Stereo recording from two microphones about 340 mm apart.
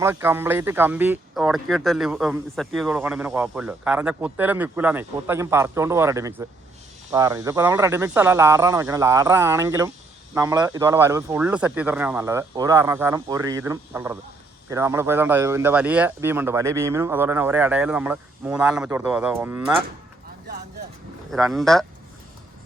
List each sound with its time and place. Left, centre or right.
0.0 s speech: centre
21.5 s speech: centre